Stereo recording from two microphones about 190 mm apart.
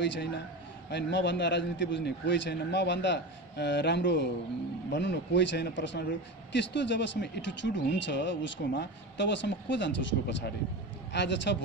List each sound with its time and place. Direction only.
0.0 s speech: 65° left (ahead or behind)